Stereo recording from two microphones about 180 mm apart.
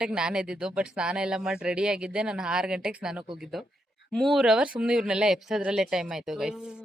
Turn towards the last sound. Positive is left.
turn(degrees=-5)  # may be behind; listen again after turning